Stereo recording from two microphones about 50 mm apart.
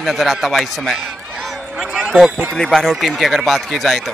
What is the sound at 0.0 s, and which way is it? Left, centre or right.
Speech, centre.